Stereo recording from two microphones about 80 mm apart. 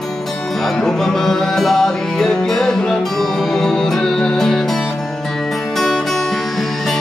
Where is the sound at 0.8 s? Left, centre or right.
Centre.